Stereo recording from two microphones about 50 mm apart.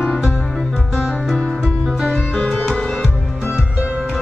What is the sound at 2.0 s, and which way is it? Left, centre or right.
Music, centre.